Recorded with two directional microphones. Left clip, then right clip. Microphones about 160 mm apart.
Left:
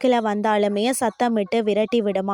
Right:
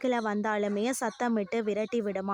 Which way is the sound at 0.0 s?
35° left (ahead or behind).